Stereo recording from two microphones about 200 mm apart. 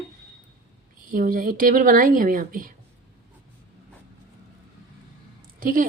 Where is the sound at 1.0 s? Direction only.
45° right (ahead or behind).